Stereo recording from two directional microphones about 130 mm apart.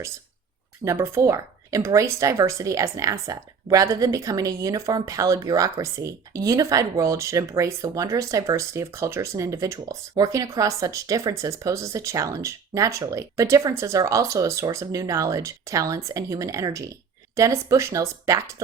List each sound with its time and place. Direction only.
0.9 s speech: 20° right (ahead or behind)